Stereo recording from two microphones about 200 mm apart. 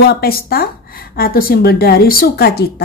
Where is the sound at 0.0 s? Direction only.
50° left (ahead or behind).